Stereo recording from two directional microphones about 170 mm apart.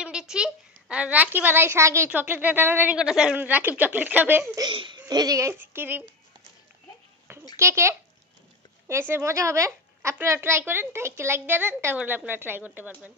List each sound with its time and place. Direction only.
0.0 s a child's voice: 5° right (ahead or behind)
4.6 s a child's voice: 25° right (ahead or behind); by 6.1 s 10° right (ahead or behind)
7.5 s a child's voice: 15° right (ahead or behind)